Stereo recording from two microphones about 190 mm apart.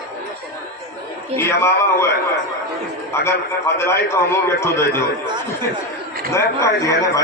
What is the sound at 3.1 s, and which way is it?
A man's voice, 15° left (ahead or behind).